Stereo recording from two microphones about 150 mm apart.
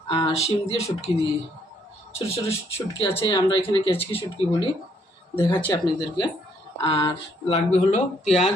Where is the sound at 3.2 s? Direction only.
30° left (ahead or behind).